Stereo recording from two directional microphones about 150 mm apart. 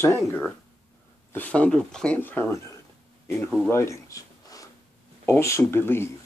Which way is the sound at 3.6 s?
20° left (ahead or behind).